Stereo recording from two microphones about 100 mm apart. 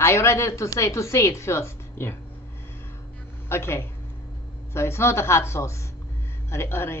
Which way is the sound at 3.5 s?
25° left (ahead or behind).